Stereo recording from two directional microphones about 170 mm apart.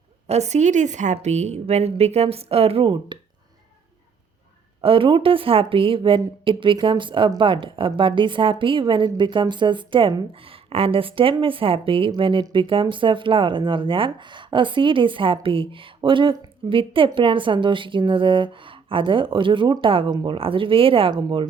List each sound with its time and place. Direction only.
0.3 s a woman's voice: 40° right (ahead or behind)
4.8 s a woman's voice: 30° right (ahead or behind)